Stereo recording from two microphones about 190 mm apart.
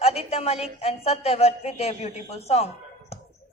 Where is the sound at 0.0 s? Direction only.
30° left (ahead or behind).